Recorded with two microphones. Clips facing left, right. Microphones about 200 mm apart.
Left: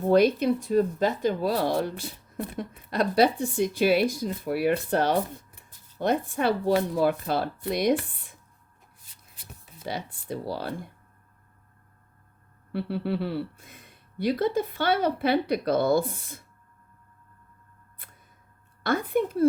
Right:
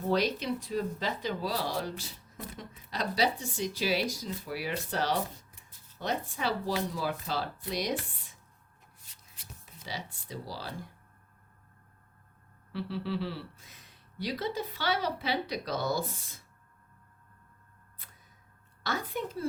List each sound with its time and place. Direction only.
0.1 s speech: 55° left (ahead or behind)
9.5 s speech: 55° left (ahead or behind)
12.7 s speech: 55° left (ahead or behind)
18.8 s speech: 55° left (ahead or behind)